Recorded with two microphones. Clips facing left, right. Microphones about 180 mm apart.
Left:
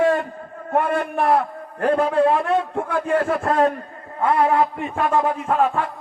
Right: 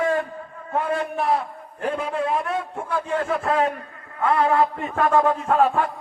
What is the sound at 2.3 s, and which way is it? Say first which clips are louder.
Speech: left 5 dB; 70° left (ahead or behind).